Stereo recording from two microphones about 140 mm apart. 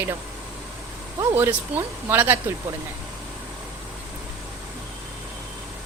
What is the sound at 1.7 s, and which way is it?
Speech, 10° right (ahead or behind).